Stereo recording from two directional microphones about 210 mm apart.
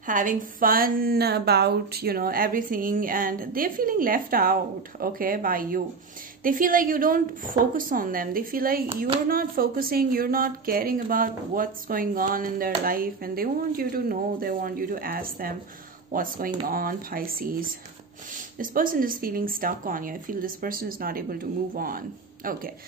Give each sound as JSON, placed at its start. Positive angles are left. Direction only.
{"t": 0.0, "sound": "a woman's voice", "side_deg": -40}